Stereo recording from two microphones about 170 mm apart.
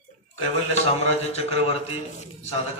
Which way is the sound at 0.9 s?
40° left (ahead or behind).